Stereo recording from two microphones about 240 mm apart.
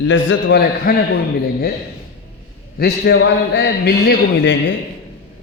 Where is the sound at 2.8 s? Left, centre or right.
Left.